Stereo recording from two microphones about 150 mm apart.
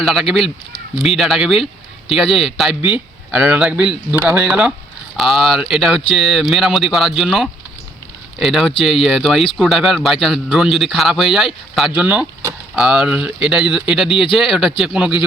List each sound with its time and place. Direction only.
0.0 s a man's voice: centre (ahead or behind)
12.7 s a man's voice: 5° right (ahead or behind)